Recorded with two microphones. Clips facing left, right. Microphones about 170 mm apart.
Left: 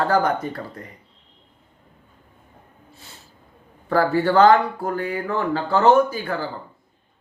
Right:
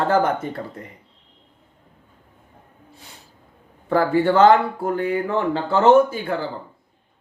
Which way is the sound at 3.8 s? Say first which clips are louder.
Right 1 dB; 20° right (ahead or behind).